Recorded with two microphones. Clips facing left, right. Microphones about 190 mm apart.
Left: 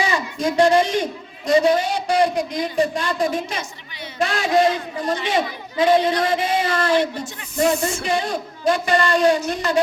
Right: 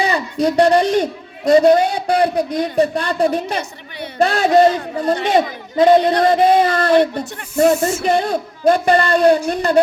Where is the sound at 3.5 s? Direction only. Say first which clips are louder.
Right 6 dB; 60° right (ahead or behind).